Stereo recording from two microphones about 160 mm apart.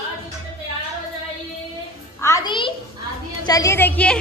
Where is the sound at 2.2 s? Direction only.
25° left (ahead or behind).